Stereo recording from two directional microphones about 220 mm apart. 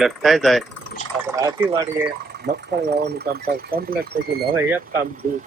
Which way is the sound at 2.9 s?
45° right (ahead or behind).